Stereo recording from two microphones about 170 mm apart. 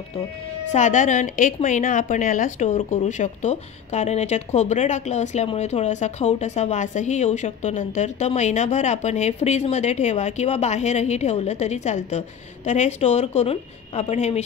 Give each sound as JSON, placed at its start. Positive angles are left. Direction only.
{"t": 0.7, "sound": "a woman's voice", "side_deg": 45}